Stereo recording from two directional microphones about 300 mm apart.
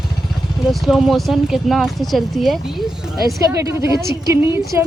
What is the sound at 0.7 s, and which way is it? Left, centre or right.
A woman's voice, centre.